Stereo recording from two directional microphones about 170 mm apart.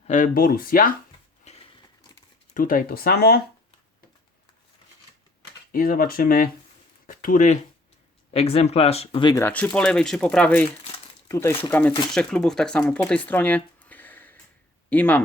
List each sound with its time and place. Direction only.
0.1 s speech: 50° left (ahead or behind)
1.5 s a sound: 35° left (ahead or behind)
2.5 s speech: 50° left (ahead or behind)
5.7 s speech: 55° left (ahead or behind); by 9.3 s 35° left (ahead or behind)
9.3 s speech: 10° left (ahead or behind)